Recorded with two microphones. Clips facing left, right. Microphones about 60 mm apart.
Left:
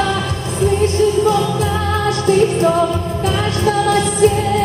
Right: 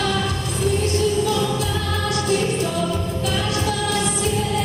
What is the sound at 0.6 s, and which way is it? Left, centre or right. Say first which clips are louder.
Music: left 6 dB; left.